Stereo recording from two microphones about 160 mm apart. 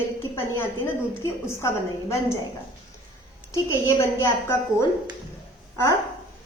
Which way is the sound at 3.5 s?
20° left (ahead or behind).